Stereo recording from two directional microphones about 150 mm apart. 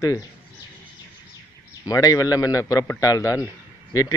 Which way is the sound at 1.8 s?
25° left (ahead or behind).